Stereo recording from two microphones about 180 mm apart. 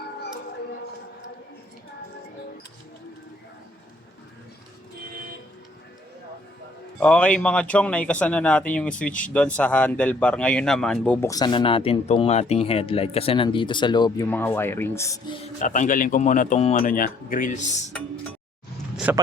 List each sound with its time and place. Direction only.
7.0 s speech: 5° left (ahead or behind)
11.3 s speech: 25° left (ahead or behind)
14.3 s speech: 10° left (ahead or behind)
15.5 s speech: 45° left (ahead or behind)
19.1 s speech: 10° right (ahead or behind)